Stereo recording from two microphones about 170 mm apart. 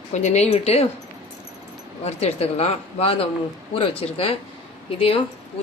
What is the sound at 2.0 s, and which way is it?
A woman's voice, 40° left (ahead or behind).